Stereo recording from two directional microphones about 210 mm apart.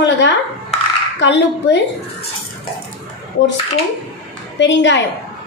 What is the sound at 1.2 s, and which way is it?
Speech, 55° left (ahead or behind).